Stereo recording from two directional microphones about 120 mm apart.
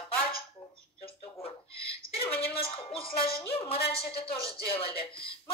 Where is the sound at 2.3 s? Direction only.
55° left (ahead or behind).